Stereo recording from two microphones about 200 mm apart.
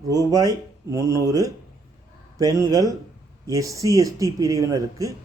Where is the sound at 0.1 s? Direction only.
15° right (ahead or behind).